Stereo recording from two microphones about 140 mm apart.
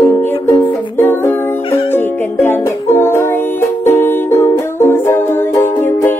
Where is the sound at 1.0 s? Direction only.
15° left (ahead or behind).